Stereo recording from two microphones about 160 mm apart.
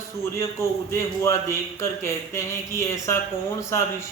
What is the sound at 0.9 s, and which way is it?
Speech, 15° left (ahead or behind).